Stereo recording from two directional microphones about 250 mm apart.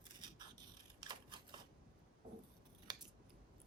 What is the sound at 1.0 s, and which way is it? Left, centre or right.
Scissors, centre.